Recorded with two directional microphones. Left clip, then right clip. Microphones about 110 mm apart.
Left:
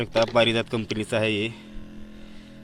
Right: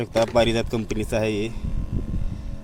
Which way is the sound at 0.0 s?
20° right (ahead or behind).